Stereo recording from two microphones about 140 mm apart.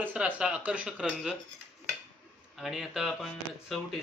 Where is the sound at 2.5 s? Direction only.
Centre (ahead or behind).